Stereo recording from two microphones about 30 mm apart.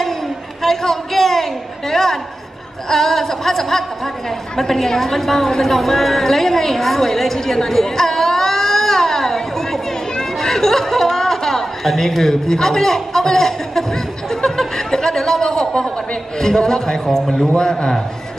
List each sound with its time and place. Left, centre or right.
0.6 s a sound: centre
2.9 s a woman's voice: centre
17.6 s a man's voice: left